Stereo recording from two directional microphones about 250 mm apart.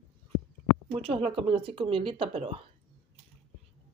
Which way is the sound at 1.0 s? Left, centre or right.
Right.